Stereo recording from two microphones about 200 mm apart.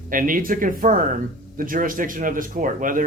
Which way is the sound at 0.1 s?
40° right (ahead or behind).